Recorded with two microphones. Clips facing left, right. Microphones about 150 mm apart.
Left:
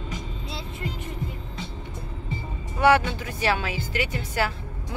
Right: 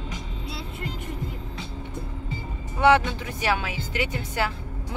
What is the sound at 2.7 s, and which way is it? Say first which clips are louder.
Speech: even; 20° right (ahead or behind).